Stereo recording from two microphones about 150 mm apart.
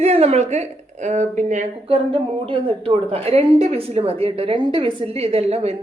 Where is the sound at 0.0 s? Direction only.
45° right (ahead or behind).